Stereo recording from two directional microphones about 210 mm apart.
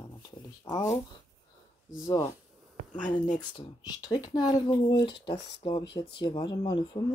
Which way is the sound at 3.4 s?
20° left (ahead or behind).